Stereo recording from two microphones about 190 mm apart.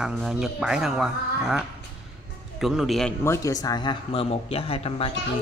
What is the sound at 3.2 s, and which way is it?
Speech, 15° left (ahead or behind).